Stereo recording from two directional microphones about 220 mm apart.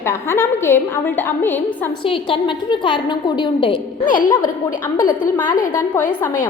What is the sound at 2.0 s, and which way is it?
A woman's voice, 25° left (ahead or behind).